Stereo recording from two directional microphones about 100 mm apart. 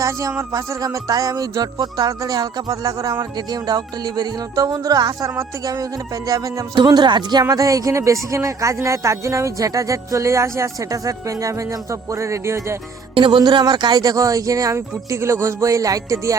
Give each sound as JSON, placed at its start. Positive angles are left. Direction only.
{"t": 0.0, "sound": "speech", "side_deg": -30}
{"t": 6.7, "sound": "speech", "side_deg": -45}
{"t": 7.4, "sound": "speech", "side_deg": -35}
{"t": 13.1, "sound": "speech", "side_deg": -55}